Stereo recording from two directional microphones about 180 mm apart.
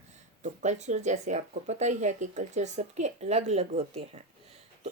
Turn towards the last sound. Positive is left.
turn(degrees=-35)  # may be behind; listen again after turning